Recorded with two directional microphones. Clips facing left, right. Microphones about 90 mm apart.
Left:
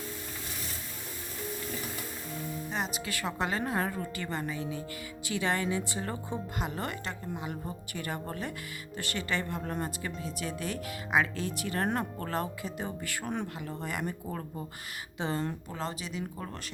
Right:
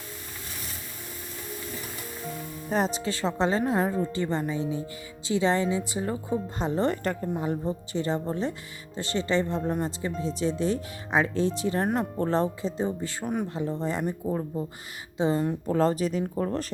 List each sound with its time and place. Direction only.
2.6 s speech: 40° right (ahead or behind); by 6.4 s 15° right (ahead or behind)
6.6 s speech: 30° right (ahead or behind)
6.9 s a woman's voice: 45° right (ahead or behind)
7.6 s speech: 25° right (ahead or behind)
13.2 s speech: 10° right (ahead or behind)
13.5 s speech: 25° right (ahead or behind)
15.6 s speech: 40° right (ahead or behind)